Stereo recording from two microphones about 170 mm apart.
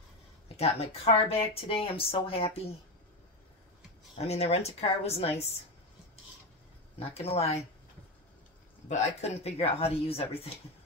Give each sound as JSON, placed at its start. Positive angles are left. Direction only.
{"t": 0.6, "sound": "speech", "side_deg": 35}
{"t": 4.2, "sound": "speech", "side_deg": 35}
{"t": 7.0, "sound": "speech", "side_deg": 35}
{"t": 8.8, "sound": "speech", "side_deg": 40}